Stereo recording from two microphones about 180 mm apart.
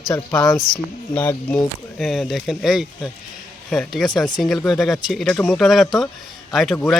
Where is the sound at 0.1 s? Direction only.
20° left (ahead or behind).